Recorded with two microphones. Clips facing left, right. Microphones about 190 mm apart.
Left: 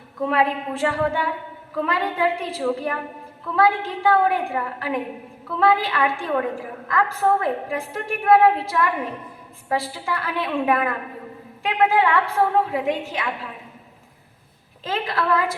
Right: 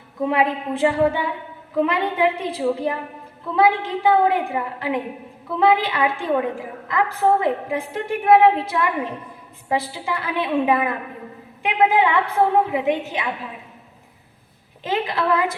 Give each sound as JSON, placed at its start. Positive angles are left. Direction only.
{"t": 0.2, "sound": "a woman's voice", "side_deg": -20}
{"t": 14.8, "sound": "a woman's voice", "side_deg": -20}